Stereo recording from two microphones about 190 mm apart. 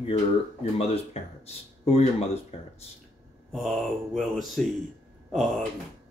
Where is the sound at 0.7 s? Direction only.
30° left (ahead or behind).